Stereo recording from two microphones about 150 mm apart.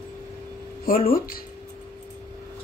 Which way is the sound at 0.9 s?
70° left (ahead or behind).